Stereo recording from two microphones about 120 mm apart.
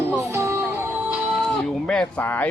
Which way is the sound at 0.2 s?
25° right (ahead or behind).